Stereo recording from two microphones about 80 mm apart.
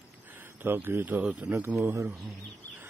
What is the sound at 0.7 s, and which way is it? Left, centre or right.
Speech, right.